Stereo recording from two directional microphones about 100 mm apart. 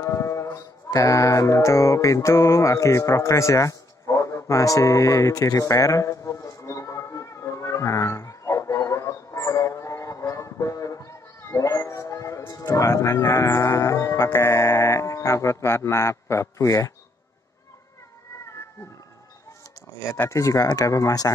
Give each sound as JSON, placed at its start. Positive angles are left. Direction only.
{"t": 0.0, "sound": "sheep", "side_deg": 30}
{"t": 0.8, "sound": "mantra", "side_deg": 35}
{"t": 18.4, "sound": "cat", "side_deg": 30}
{"t": 20.0, "sound": "speech", "side_deg": 30}